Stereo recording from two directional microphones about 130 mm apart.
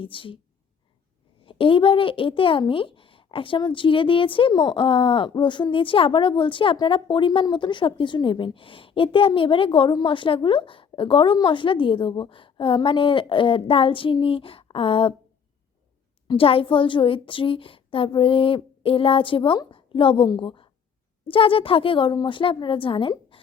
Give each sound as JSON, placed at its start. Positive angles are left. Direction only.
{"t": 0.0, "sound": "speech", "side_deg": 40}
{"t": 1.5, "sound": "speech", "side_deg": 40}
{"t": 16.2, "sound": "speech", "side_deg": 40}